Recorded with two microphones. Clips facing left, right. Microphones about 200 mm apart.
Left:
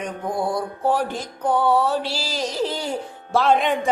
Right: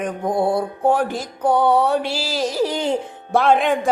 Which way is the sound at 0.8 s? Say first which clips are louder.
Right 3 dB; 50° right (ahead or behind).